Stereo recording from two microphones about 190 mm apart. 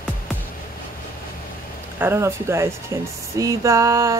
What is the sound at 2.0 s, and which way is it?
A woman's voice, 15° right (ahead or behind).